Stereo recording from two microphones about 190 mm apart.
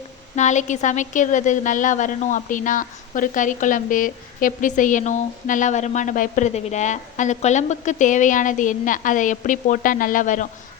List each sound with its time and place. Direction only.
0.3 s a woman's voice: 40° left (ahead or behind)